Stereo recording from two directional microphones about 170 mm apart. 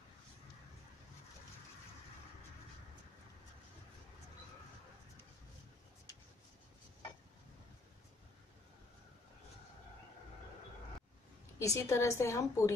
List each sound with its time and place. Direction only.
11.5 s a woman's voice: 20° left (ahead or behind)